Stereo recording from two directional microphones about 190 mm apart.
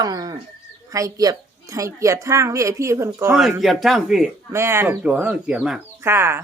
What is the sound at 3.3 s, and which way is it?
Speech, centre (ahead or behind).